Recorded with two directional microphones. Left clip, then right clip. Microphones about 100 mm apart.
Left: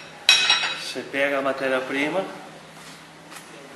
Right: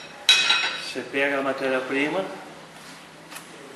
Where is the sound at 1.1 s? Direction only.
5° left (ahead or behind).